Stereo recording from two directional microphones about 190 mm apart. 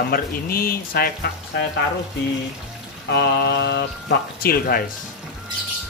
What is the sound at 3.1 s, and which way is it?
Speech, 60° left (ahead or behind).